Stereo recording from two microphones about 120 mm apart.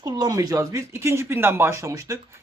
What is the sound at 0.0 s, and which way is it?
Speech, 30° right (ahead or behind).